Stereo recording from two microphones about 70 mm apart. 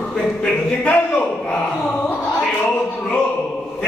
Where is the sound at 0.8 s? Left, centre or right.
Centre.